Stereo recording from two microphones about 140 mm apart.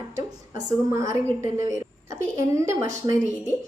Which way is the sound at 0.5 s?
20° right (ahead or behind).